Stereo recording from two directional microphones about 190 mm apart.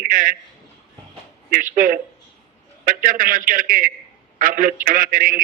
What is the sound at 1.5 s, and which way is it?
A man's voice, 45° right (ahead or behind).